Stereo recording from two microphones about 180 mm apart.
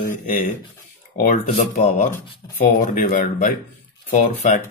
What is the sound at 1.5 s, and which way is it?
Speech, 45° left (ahead or behind).